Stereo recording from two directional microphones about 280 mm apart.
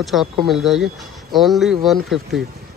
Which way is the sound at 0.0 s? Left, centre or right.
Centre.